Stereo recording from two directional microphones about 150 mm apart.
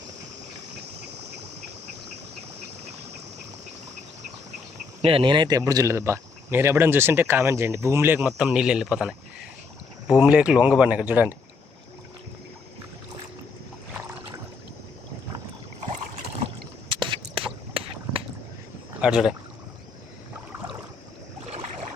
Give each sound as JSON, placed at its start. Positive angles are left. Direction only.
{"t": 5.0, "sound": "speech", "side_deg": -35}
{"t": 8.3, "sound": "speech", "side_deg": -5}
{"t": 10.2, "sound": "speech", "side_deg": -10}
{"t": 16.9, "sound": "a sound", "side_deg": -35}
{"t": 19.0, "sound": "speech", "side_deg": -5}